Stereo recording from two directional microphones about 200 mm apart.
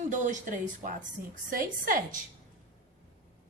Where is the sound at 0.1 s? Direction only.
40° right (ahead or behind).